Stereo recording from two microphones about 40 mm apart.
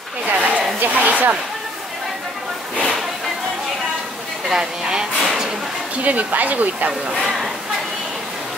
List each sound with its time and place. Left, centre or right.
0.3 s a sound: right
0.7 s speech: right
4.5 s speech: centre
6.0 s speech: right
7.2 s speech: centre